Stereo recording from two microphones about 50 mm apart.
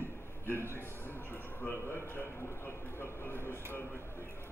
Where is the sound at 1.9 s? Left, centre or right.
Left.